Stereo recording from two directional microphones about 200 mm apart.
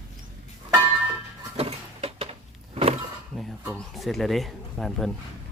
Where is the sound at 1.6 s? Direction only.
30° right (ahead or behind).